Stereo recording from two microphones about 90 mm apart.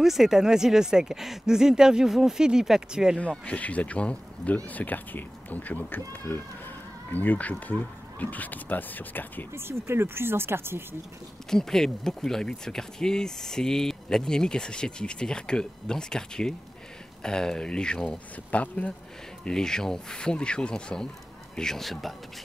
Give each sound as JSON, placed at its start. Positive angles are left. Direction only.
{"t": 0.0, "sound": "speech", "side_deg": -5}
{"t": 3.2, "sound": "speech", "side_deg": 15}
{"t": 9.5, "sound": "speech", "side_deg": -30}
{"t": 11.5, "sound": "speech", "side_deg": 5}